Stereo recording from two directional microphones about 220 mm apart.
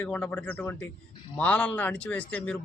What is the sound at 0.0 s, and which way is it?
Speech, 5° left (ahead or behind).